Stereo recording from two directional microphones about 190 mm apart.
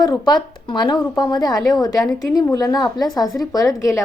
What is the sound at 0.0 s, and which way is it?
A woman's voice, 20° left (ahead or behind).